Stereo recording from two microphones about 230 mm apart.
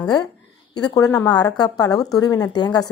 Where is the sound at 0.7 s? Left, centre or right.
Centre.